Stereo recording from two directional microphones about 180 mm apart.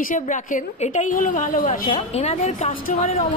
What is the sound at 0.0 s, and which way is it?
A woman's voice, 45° left (ahead or behind).